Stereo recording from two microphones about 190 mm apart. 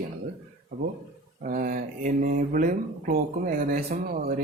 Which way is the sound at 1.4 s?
50° right (ahead or behind).